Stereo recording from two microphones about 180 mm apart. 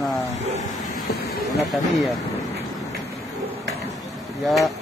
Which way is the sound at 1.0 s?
60° left (ahead or behind).